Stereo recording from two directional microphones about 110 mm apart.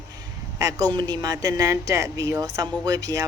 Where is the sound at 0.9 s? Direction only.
40° right (ahead or behind).